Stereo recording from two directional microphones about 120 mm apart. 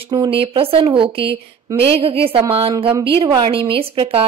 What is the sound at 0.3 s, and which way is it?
A woman's voice, 50° right (ahead or behind).